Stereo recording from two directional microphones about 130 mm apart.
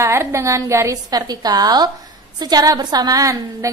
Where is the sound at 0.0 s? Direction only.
20° right (ahead or behind).